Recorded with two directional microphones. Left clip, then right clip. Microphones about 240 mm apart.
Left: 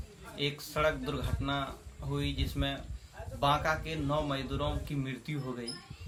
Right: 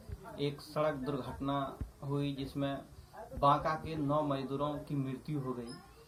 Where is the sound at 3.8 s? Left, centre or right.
Left.